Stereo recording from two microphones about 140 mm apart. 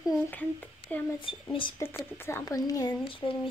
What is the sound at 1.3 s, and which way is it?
Speech, 40° left (ahead or behind).